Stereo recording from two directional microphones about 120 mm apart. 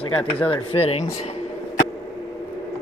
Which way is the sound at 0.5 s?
55° left (ahead or behind).